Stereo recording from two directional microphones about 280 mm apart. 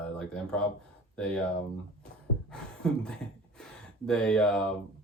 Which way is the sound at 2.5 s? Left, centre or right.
Centre.